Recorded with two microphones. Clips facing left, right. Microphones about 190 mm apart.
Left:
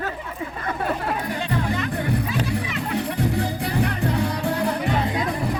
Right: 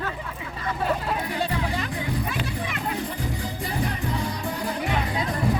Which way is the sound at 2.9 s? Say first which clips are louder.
Left 7 dB; 70° left (ahead or behind).